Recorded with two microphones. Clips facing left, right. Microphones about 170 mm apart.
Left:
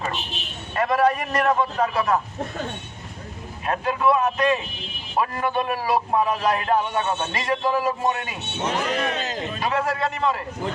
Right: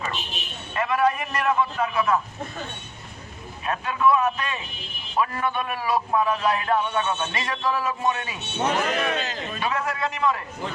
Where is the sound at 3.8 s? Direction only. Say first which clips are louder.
Even; 35° left (ahead or behind).